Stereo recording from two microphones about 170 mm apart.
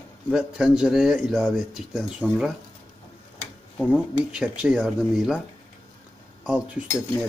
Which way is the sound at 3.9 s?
5° right (ahead or behind).